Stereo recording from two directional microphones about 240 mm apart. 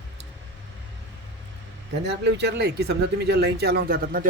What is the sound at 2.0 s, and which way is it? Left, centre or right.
Speech, right.